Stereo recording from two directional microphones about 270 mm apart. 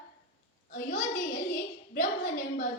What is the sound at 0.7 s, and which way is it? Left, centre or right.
Child singing, left.